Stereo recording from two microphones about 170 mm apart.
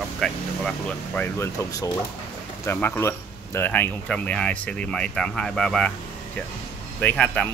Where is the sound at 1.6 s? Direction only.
20° left (ahead or behind); by 5.9 s 5° left (ahead or behind).